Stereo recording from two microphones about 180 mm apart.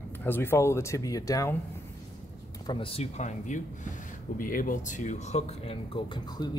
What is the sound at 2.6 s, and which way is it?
Speech, 25° left (ahead or behind).